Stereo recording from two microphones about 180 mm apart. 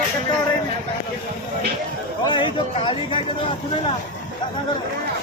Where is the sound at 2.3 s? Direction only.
25° left (ahead or behind).